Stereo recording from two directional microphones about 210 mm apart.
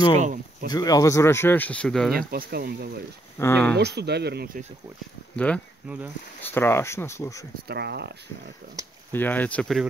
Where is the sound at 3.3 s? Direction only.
10° left (ahead or behind).